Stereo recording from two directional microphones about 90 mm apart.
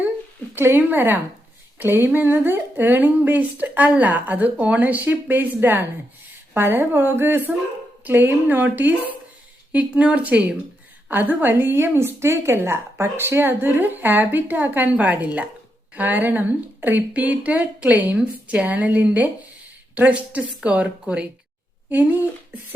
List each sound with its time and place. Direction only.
0.5 s a woman's voice: 25° right (ahead or behind)